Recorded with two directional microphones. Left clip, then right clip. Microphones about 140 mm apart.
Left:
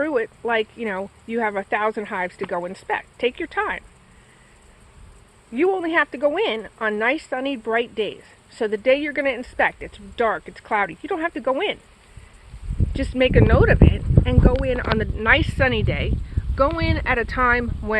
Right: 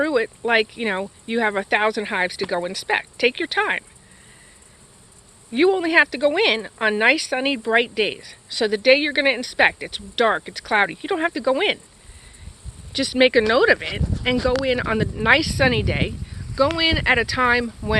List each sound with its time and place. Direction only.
0.0 s speech: 30° right (ahead or behind)
5.5 s speech: 30° right (ahead or behind)
8.2 s speech: 35° right (ahead or behind)
8.7 s speech: 20° right (ahead or behind)
13.0 s speech: 30° right (ahead or behind)